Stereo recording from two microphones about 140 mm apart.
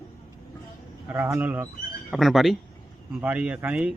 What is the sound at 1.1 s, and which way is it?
Speech, 15° right (ahead or behind).